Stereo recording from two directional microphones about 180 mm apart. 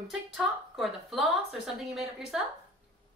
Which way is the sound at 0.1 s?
Centre (ahead or behind).